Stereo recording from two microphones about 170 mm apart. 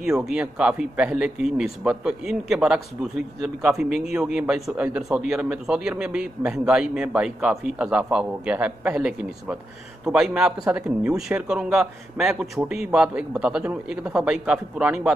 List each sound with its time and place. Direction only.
0.3 s a man's voice: 5° right (ahead or behind)